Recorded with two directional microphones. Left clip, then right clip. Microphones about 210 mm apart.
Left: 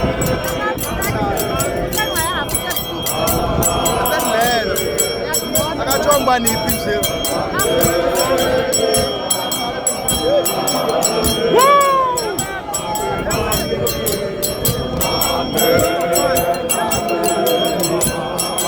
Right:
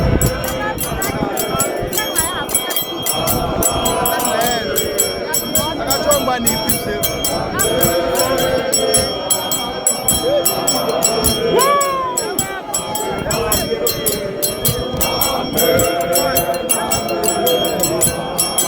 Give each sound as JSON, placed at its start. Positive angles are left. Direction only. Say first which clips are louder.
{"t": 4.1, "sound": "music", "louder": "left 2 dB", "side_deg": 55}
{"t": 5.9, "sound": "a sound", "louder": "left 3 dB", "side_deg": 45}
{"t": 11.5, "sound": "music", "louder": "left 4 dB", "side_deg": 50}